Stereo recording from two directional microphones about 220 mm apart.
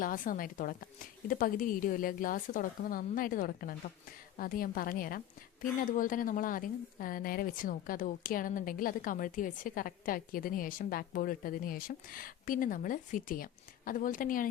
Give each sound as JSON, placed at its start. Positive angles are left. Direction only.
{"t": 0.0, "sound": "a woman's voice", "side_deg": 40}